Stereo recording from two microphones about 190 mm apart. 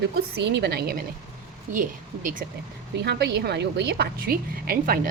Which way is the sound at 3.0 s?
60° right (ahead or behind).